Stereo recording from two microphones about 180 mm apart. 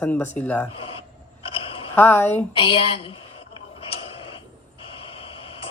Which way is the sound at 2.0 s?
10° left (ahead or behind).